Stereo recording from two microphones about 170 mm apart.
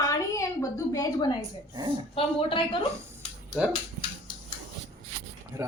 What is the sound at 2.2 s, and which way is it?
Speech, 30° left (ahead or behind).